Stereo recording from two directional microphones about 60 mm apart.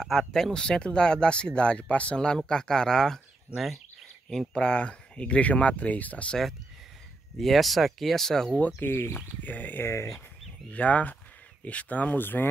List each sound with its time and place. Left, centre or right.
0.0 s speech: centre
3.5 s speech: centre
4.3 s speech: centre
7.3 s speech: centre
8.7 s speech: left
9.8 s speech: left
10.7 s speech: left